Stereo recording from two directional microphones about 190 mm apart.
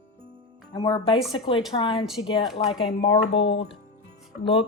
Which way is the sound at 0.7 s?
25° left (ahead or behind).